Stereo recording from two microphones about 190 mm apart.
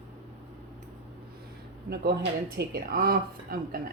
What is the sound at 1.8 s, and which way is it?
Speech, 55° right (ahead or behind).